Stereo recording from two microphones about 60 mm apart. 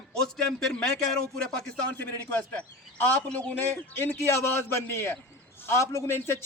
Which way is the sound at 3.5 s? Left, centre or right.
Left.